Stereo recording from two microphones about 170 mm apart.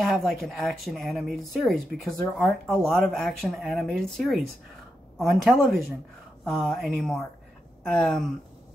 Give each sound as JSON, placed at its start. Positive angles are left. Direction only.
{"t": 0.0, "sound": "speech", "side_deg": 0}